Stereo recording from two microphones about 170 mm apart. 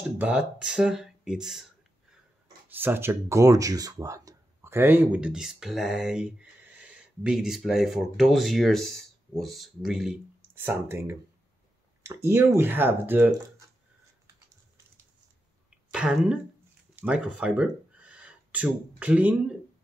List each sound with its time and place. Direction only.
0.2 s speech: 5° right (ahead or behind)
2.7 s speech: 10° right (ahead or behind)
15.9 s speech: 5° right (ahead or behind)